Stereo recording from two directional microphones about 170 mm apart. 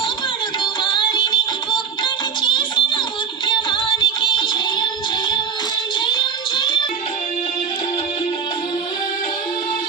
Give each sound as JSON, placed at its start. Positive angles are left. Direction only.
{"t": 0.6, "sound": "music", "side_deg": 25}
{"t": 6.1, "sound": "music", "side_deg": 25}